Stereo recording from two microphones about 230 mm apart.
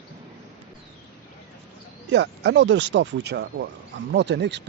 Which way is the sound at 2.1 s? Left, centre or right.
Right.